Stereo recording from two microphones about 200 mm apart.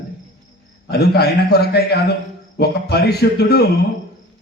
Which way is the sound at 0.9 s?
55° left (ahead or behind).